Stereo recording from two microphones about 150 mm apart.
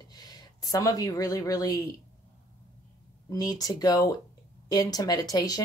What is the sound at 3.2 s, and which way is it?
Speech, 25° left (ahead or behind).